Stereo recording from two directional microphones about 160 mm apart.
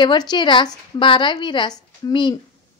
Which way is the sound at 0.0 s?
25° left (ahead or behind).